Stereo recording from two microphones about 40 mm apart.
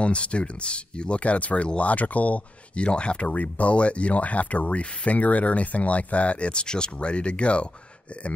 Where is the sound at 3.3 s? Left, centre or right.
Left.